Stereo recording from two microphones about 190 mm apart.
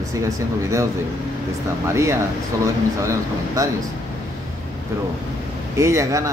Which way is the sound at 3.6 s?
20° right (ahead or behind).